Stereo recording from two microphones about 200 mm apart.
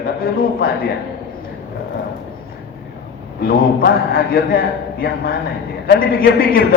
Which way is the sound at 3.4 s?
45° left (ahead or behind).